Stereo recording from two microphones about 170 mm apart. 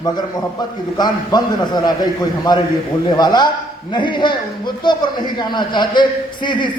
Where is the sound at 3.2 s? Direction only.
25° left (ahead or behind).